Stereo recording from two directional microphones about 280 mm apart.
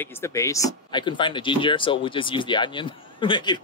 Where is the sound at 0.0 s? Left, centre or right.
Centre.